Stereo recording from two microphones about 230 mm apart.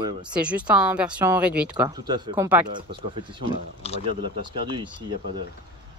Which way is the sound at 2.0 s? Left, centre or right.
Centre.